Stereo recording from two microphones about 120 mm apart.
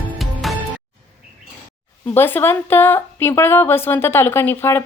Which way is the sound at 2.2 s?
20° left (ahead or behind).